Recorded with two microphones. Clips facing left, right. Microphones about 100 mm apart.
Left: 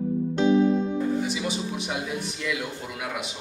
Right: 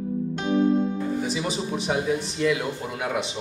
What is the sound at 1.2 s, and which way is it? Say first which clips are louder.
Speech: right 1 dB; 35° right (ahead or behind).